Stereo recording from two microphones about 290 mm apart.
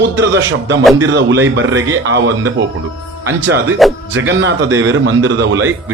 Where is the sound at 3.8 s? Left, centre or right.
Centre.